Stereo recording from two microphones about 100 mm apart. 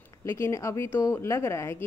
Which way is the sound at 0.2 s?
30° left (ahead or behind).